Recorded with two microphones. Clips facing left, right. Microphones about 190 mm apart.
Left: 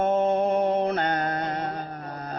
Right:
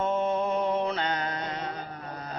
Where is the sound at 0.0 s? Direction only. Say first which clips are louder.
Left 5 dB; 50° left (ahead or behind).